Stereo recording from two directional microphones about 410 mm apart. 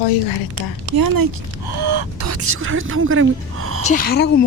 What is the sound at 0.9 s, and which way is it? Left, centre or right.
Speech, right.